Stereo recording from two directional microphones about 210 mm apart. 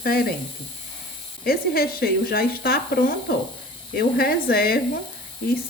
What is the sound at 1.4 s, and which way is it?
Speech, 45° left (ahead or behind).